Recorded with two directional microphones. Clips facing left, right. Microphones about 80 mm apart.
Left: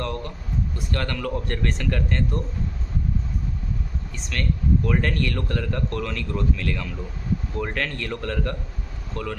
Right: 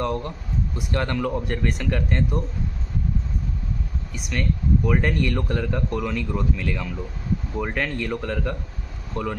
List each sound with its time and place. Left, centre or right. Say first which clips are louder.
0.0 s a man's voice: right 4 dB; centre
4.1 s a man's voice: right 2 dB; centre